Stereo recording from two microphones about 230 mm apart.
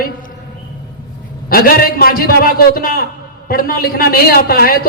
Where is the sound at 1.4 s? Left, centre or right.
Left.